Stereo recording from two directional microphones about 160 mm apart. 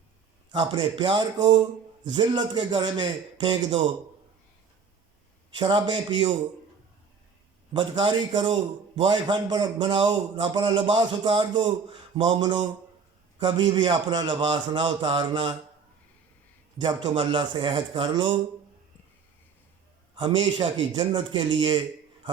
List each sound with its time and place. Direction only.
0.5 s a man's voice: 30° right (ahead or behind)
5.5 s a man's voice: 30° right (ahead or behind)
7.7 s a man's voice: 30° right (ahead or behind)
16.7 s a man's voice: 30° right (ahead or behind)
20.1 s a man's voice: 30° right (ahead or behind)